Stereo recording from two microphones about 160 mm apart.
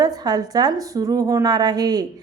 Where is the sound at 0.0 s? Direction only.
25° right (ahead or behind).